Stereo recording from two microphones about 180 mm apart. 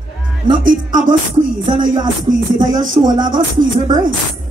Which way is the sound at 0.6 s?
45° right (ahead or behind).